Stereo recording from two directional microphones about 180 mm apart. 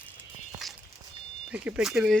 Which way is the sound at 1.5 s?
5° right (ahead or behind).